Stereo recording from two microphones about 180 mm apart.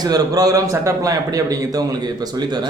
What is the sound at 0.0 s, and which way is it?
A man's voice, 20° right (ahead or behind).